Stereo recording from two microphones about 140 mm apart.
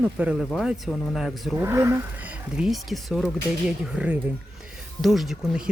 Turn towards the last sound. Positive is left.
turn(degrees=-5)  # may be behind; listen again after turning